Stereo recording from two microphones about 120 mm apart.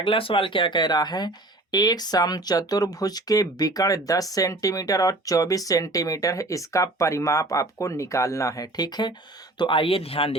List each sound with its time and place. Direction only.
0.0 s speech: 45° left (ahead or behind)